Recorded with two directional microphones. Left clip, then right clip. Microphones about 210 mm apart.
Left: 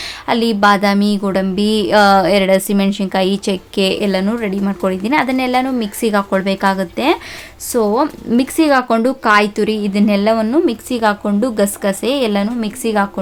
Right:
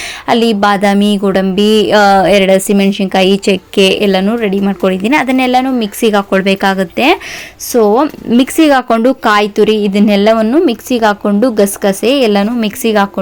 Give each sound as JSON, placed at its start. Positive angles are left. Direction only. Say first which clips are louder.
{"t": 0.3, "sound": "a woman's voice", "louder": "right 3 dB", "side_deg": -10}